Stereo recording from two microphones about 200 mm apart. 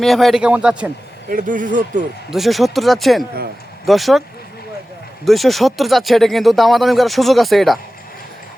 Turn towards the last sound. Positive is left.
turn(degrees=0)  # may be behind; listen again after turning